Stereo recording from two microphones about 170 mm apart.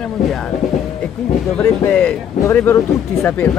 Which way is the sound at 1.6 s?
10° left (ahead or behind).